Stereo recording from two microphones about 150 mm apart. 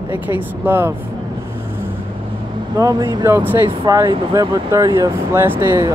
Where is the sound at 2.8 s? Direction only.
25° right (ahead or behind).